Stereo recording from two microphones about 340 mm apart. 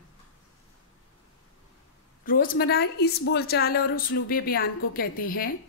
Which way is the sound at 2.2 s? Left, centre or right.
Left.